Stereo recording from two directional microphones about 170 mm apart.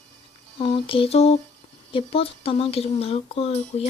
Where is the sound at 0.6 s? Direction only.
30° left (ahead or behind).